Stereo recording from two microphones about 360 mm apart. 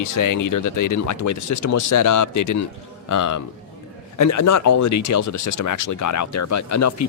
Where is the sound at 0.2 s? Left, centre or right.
Left.